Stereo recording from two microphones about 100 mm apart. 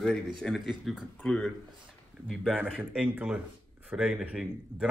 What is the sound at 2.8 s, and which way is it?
Speech, 15° right (ahead or behind).